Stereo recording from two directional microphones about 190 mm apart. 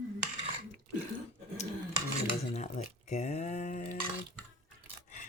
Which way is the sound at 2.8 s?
40° left (ahead or behind).